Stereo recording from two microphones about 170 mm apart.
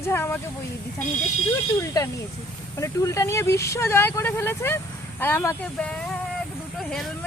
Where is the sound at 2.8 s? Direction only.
20° left (ahead or behind).